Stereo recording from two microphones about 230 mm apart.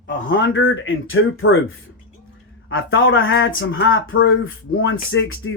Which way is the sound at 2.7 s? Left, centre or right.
Left.